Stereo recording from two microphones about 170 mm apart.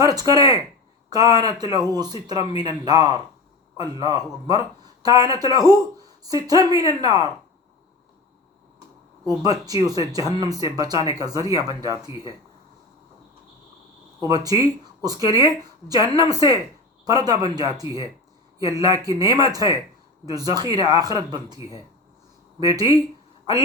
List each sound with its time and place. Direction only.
0.0 s speech: 20° right (ahead or behind)
9.4 s speech: 20° right (ahead or behind)
14.2 s speech: 20° right (ahead or behind)